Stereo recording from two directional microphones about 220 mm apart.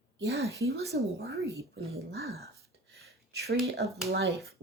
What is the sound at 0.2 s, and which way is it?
Speech, 50° right (ahead or behind).